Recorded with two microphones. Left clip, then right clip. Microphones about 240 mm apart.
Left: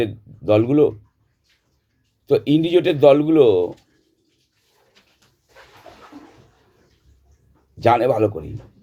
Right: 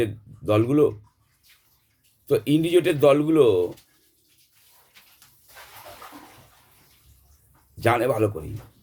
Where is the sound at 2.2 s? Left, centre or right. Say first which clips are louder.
Left 4 dB; centre.